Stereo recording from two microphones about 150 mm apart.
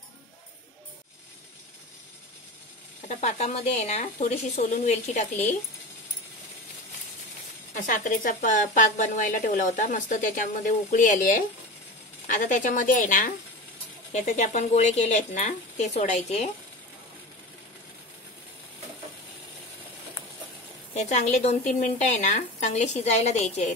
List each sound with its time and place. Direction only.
3.1 s speech: 50° left (ahead or behind)
7.7 s a woman's voice: 60° left (ahead or behind)
14.1 s speech: 50° left (ahead or behind)
20.9 s speech: 50° left (ahead or behind)